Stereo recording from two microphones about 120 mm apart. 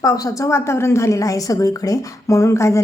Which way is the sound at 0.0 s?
30° left (ahead or behind).